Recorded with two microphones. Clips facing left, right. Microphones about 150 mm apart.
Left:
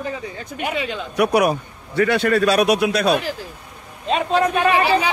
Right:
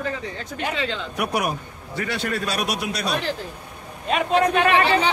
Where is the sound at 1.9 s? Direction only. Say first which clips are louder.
Left 9 dB; 60° left (ahead or behind).